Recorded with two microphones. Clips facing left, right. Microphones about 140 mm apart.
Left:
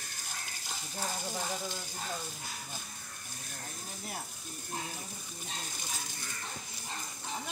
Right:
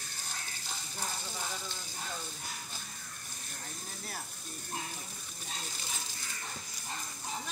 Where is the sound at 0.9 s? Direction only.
45° left (ahead or behind).